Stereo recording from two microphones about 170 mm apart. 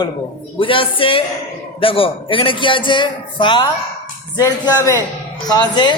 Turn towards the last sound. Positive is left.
turn(degrees=25)  # may be behind; listen again after turning